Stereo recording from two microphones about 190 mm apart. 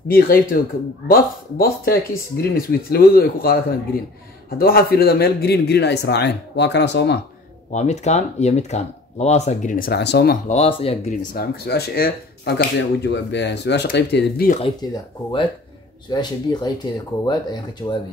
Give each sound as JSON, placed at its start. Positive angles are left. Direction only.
{"t": 0.1, "sound": "speech", "side_deg": 50}
{"t": 7.7, "sound": "speech", "side_deg": 35}
{"t": 10.5, "sound": "speech", "side_deg": 30}
{"t": 11.3, "sound": "speech", "side_deg": 55}
{"t": 14.8, "sound": "speech", "side_deg": 20}
{"t": 16.1, "sound": "speech", "side_deg": 20}